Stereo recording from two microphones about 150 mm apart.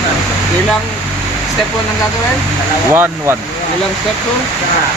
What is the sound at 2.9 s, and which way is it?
Speech, 15° right (ahead or behind).